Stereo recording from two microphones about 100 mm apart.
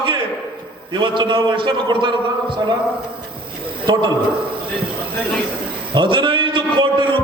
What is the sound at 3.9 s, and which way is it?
Speech, 45° right (ahead or behind).